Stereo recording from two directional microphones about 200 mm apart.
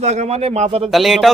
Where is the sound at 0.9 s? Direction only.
Centre (ahead or behind).